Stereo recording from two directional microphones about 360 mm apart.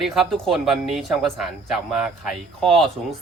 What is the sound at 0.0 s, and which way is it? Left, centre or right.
Speech, centre.